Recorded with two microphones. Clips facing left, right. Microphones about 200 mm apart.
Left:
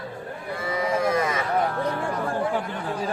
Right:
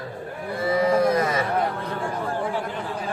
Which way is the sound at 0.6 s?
35° right (ahead or behind).